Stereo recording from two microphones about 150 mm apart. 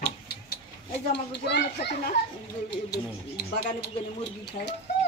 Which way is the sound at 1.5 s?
90° left.